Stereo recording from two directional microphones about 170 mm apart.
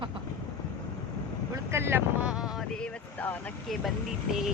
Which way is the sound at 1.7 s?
15° right (ahead or behind).